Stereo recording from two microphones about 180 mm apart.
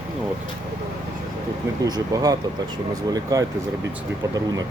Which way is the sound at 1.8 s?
20° right (ahead or behind).